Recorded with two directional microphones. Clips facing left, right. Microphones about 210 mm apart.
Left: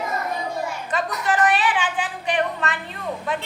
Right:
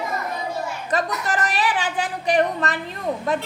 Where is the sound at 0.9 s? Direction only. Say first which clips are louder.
Right 1 dB; 40° right (ahead or behind).